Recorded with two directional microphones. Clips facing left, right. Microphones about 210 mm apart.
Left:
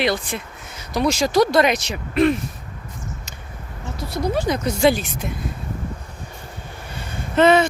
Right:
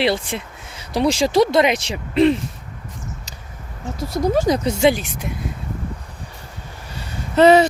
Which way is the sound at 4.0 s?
45° right (ahead or behind).